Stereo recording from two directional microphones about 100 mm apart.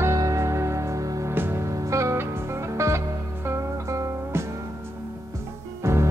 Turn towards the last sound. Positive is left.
turn(degrees=-25)  # may be behind; listen again after turning